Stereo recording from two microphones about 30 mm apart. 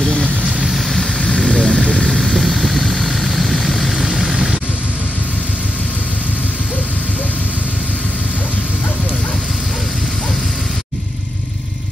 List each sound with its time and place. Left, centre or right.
0.8 s vehicle: centre
2.1 s vehicle: centre